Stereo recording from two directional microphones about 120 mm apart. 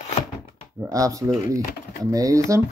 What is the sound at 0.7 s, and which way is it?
Speech, 25° right (ahead or behind).